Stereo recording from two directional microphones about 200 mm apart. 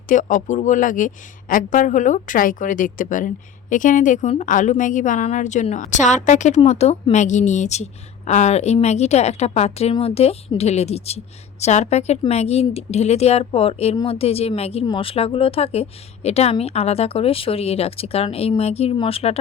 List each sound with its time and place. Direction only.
0.1 s a woman's voice: 40° left (ahead or behind)